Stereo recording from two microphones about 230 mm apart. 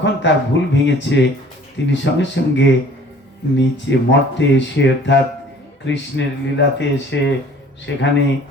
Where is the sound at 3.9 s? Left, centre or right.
Left.